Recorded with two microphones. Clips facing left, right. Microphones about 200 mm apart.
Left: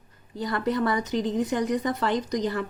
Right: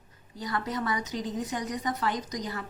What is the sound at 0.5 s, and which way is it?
A woman's voice, 60° left (ahead or behind).